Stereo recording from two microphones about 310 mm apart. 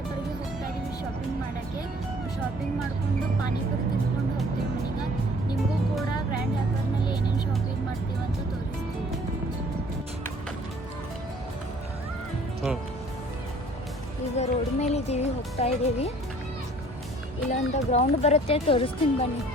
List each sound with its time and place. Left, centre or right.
7.0 s music: centre
14.3 s speech: left
17.5 s speech: left